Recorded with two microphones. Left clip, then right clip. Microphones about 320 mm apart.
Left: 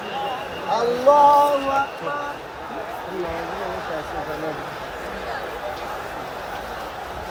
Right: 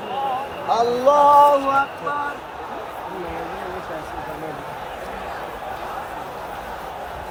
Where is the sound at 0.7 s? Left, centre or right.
Right.